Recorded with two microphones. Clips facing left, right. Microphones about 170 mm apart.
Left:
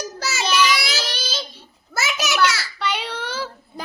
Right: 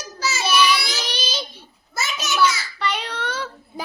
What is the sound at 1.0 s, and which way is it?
Baby cry, 15° right (ahead or behind).